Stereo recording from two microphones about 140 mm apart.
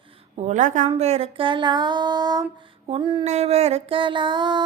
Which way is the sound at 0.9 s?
50° right (ahead or behind).